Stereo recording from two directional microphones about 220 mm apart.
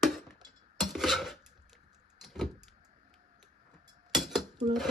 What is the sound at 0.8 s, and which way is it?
Dishes, centre (ahead or behind).